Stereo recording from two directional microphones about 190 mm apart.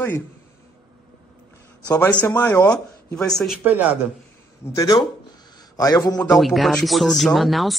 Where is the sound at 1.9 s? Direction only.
10° left (ahead or behind).